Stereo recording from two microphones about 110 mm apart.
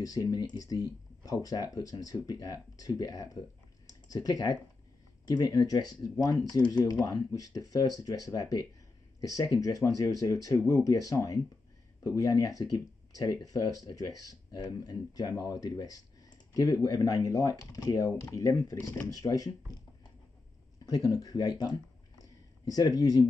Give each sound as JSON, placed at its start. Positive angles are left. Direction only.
{"t": 0.0, "sound": "speech", "side_deg": 35}
{"t": 20.8, "sound": "speech", "side_deg": 35}
{"t": 22.2, "sound": "a sound", "side_deg": 35}